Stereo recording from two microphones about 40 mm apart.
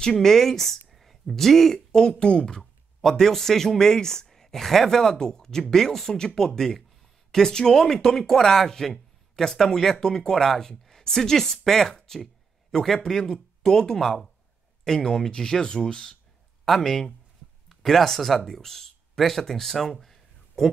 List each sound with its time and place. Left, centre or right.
0.0 s speech: centre
2.6 s speech: centre
16.6 s speech: centre